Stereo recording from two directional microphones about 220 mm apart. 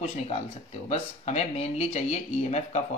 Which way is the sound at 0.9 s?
30° left (ahead or behind).